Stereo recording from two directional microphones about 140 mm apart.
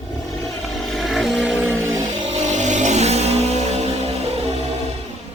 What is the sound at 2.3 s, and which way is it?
Vehicle, 60° right (ahead or behind).